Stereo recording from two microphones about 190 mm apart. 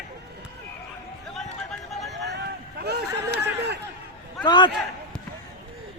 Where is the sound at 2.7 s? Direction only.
60° right (ahead or behind).